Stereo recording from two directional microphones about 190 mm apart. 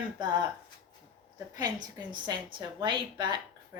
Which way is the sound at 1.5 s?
20° right (ahead or behind).